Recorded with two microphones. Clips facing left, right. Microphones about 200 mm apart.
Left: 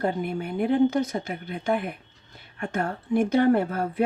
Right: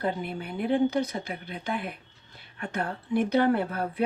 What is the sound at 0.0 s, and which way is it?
Speech, 50° left (ahead or behind).